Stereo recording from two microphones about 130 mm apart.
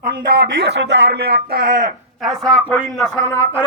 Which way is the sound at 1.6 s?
90° right.